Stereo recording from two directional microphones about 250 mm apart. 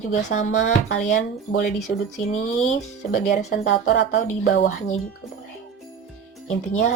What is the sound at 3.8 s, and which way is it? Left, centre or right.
Speech, left.